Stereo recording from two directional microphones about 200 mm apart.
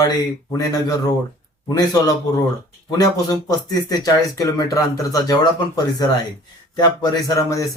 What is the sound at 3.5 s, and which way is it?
Speech, 20° left (ahead or behind).